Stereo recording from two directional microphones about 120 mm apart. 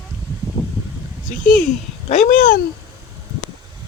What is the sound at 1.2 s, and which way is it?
Speech, 90° left.